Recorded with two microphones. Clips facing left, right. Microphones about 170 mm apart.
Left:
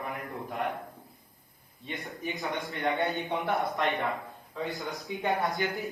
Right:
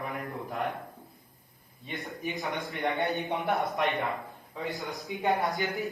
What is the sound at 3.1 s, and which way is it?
Speech, 20° right (ahead or behind).